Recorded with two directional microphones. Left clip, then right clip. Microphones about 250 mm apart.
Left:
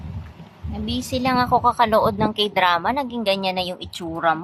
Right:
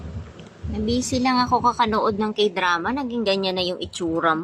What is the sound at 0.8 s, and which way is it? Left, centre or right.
A woman's voice, centre.